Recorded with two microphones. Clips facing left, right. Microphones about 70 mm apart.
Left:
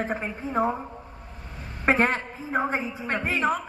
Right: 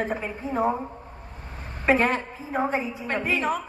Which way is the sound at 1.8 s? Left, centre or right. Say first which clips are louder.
Right 1 dB; left.